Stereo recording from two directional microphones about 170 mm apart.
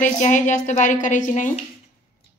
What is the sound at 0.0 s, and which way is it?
A woman's voice, 45° left (ahead or behind).